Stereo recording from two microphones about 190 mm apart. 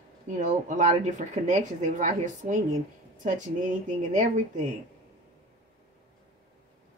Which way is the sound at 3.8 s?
40° right (ahead or behind).